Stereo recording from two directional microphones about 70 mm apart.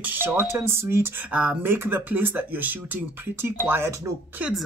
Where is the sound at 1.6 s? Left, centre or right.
Right.